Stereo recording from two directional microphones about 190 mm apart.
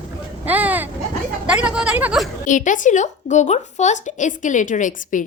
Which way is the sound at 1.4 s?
5° right (ahead or behind).